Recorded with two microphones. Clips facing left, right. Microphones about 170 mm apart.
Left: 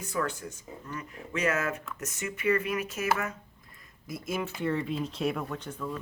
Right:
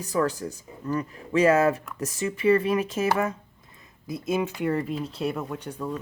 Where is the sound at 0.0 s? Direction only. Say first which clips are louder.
Right 7 dB; 35° right (ahead or behind).